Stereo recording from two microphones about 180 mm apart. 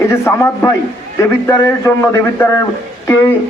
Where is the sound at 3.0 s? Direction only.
15° left (ahead or behind).